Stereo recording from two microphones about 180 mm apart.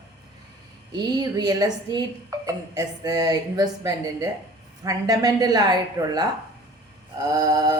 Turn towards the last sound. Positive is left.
turn(degrees=-20)  # may be behind; listen again after turning